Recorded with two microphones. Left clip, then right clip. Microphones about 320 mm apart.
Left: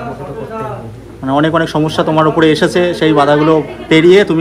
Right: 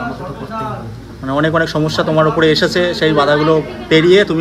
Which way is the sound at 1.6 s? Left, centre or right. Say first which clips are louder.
Left 2 dB; centre.